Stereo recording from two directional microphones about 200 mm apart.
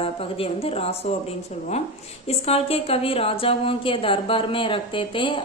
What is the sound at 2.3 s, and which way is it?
A woman's voice, 30° left (ahead or behind).